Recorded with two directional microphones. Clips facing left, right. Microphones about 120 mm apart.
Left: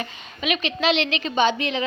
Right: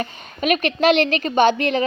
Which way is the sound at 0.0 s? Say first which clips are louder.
Right 5 dB; 50° right (ahead or behind).